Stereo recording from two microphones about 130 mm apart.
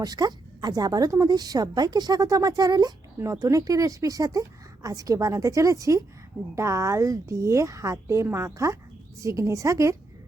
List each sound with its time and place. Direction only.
0.0 s a woman's voice: 30° right (ahead or behind)